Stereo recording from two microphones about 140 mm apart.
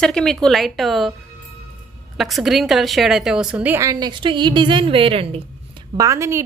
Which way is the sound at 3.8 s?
30° right (ahead or behind).